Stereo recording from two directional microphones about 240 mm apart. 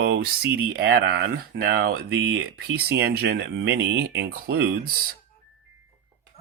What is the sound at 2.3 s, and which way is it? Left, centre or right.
Speech, right.